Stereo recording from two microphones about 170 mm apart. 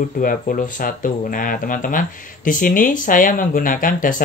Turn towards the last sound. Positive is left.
turn(degrees=55)  # may be behind; listen again after turning